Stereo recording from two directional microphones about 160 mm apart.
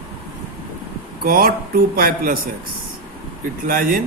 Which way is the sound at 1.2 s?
70° right (ahead or behind).